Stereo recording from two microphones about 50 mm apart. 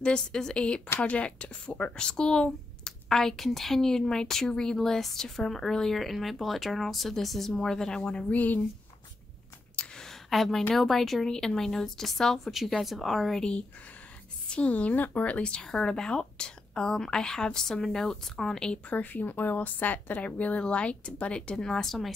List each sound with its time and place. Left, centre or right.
0.0 s speech: centre
8.3 s a woman's voice: left
9.9 s a sound: centre
10.7 s speech: centre
13.4 s a woman's voice: centre
18.9 s a woman's voice: left; by 22.1 s centre